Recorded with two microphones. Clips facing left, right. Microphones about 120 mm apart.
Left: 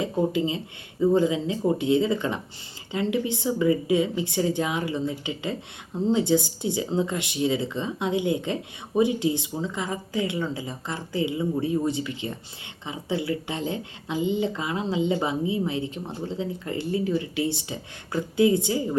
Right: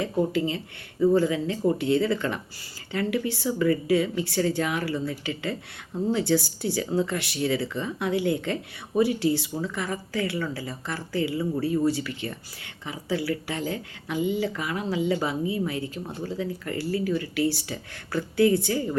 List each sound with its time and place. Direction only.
0.0 s speech: 20° left (ahead or behind)